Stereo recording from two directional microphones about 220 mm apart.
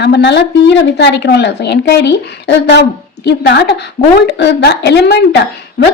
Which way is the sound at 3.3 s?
50° left (ahead or behind).